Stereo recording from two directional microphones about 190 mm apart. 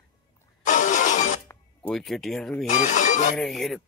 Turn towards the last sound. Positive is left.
turn(degrees=0)  # may be behind; listen again after turning